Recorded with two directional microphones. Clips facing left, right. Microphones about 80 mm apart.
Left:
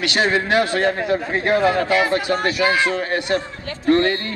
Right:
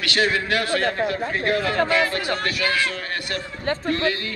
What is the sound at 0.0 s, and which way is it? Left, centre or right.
A man's voice, left.